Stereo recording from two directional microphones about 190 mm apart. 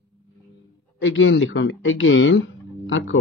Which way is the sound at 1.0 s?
85° left.